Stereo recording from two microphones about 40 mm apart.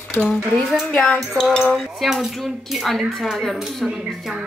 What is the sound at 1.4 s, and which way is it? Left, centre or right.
Speech, centre.